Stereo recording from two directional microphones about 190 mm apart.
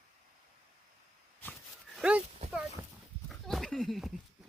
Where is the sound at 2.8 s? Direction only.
15° right (ahead or behind).